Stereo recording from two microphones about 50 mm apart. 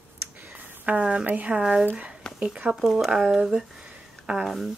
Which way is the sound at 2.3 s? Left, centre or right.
Left.